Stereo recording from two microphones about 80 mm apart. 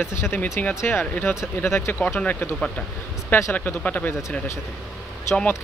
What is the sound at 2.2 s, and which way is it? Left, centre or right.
Speech, left.